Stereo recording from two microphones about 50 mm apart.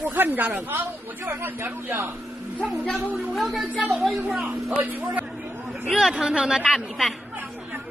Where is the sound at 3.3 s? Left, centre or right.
Centre.